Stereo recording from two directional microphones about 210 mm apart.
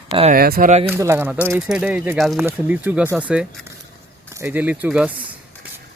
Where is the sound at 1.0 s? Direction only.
10° right (ahead or behind).